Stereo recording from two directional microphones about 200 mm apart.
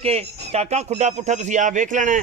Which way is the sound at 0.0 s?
30° right (ahead or behind).